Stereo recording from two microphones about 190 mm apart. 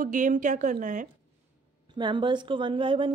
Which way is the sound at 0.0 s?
40° right (ahead or behind).